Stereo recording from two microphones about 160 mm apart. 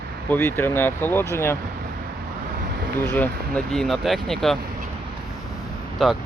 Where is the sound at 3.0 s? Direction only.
10° left (ahead or behind).